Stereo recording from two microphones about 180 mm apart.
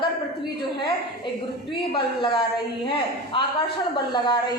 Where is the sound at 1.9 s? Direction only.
25° left (ahead or behind).